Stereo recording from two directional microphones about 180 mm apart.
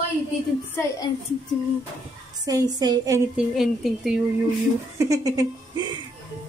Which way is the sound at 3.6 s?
Centre (ahead or behind).